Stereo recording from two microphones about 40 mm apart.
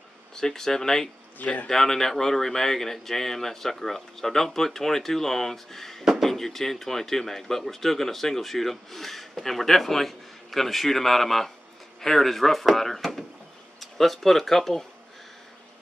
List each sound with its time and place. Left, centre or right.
0.4 s speech: centre
1.4 s a man's voice: left
1.7 s speech: centre